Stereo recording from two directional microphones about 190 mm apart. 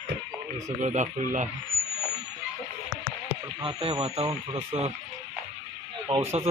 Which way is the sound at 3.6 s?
30° right (ahead or behind).